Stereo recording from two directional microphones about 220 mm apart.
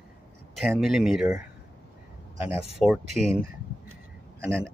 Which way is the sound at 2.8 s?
Centre (ahead or behind).